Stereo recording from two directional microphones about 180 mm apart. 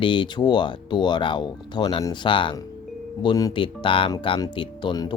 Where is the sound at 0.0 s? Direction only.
25° left (ahead or behind).